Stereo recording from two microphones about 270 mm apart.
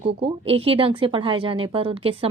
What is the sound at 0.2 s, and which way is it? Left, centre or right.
A woman's voice, right.